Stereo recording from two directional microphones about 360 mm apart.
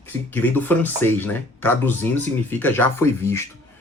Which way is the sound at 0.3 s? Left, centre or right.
Centre.